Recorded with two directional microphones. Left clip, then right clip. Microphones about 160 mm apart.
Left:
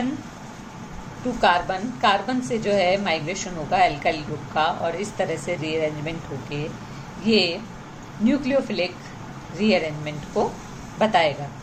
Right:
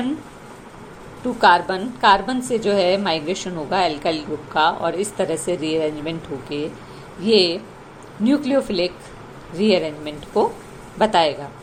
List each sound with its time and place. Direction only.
1.4 s a woman's voice: 40° right (ahead or behind)